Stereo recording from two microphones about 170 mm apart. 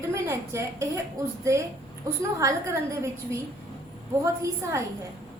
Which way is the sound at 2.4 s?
20° right (ahead or behind).